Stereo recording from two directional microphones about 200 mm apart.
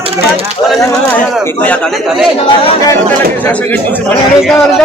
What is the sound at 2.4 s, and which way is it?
Speech, 20° left (ahead or behind).